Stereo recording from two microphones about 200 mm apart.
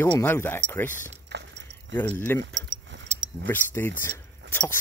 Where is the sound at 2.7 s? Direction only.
80° right.